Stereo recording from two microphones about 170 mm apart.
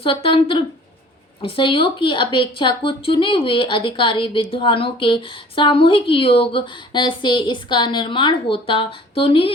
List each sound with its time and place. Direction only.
0.0 s a woman's voice: 30° left (ahead or behind)